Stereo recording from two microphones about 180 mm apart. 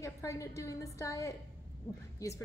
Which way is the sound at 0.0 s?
15° left (ahead or behind).